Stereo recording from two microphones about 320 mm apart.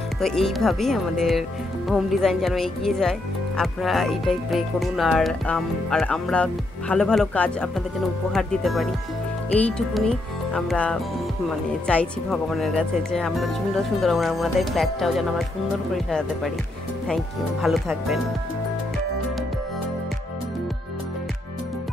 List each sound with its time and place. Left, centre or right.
0.2 s speech: centre